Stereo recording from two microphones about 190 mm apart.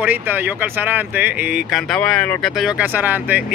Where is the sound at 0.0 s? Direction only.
10° right (ahead or behind).